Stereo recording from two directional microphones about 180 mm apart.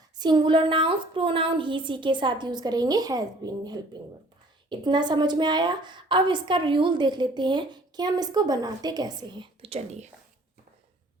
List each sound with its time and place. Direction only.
0.2 s a woman's voice: 25° right (ahead or behind)